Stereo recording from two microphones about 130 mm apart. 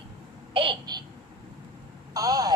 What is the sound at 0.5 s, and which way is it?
Babbling, 40° right (ahead or behind).